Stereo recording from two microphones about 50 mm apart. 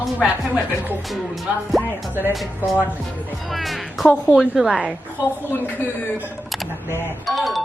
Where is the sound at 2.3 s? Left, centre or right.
Centre.